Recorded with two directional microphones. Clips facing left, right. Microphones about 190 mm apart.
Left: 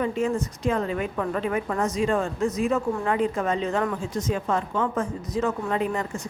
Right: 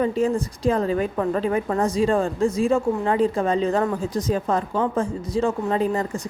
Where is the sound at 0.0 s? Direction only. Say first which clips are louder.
Right 4 dB; 35° right (ahead or behind).